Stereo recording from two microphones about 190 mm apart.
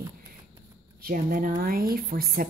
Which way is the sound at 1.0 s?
50° right (ahead or behind).